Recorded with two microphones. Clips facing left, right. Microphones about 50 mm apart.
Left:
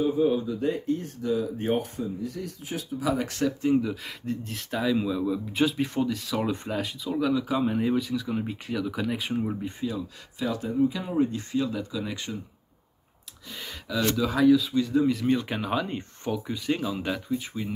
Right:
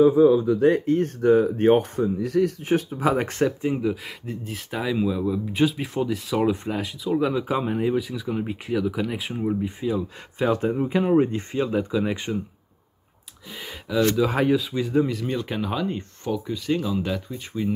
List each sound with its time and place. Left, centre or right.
0.5 s speech: right
2.1 s speech: right
2.6 s speech: right
3.6 s speech: centre
7.2 s speech: right; by 9.8 s centre
10.4 s speech: right
13.5 s speech: centre
14.3 s speech: right
14.6 s speech: right
15.0 s speech: centre